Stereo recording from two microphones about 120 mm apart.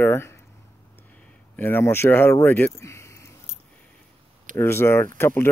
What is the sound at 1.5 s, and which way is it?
Speech, 20° left (ahead or behind).